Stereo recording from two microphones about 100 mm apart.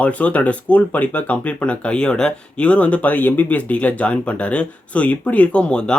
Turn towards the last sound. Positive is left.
turn(degrees=10)  # may be behind; listen again after turning